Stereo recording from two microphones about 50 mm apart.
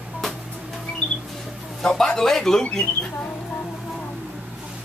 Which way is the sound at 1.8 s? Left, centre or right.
Centre.